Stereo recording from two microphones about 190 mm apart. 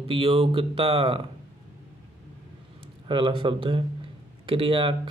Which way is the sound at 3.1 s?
25° right (ahead or behind).